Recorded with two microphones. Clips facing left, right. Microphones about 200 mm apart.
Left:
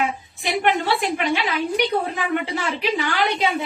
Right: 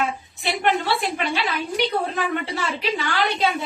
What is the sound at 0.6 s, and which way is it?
A woman's voice, 15° left (ahead or behind).